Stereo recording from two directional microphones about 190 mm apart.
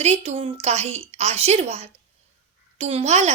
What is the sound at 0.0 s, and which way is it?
A woman's voice, 35° right (ahead or behind).